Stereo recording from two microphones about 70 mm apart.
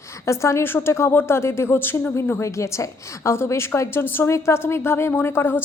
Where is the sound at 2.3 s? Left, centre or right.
Left.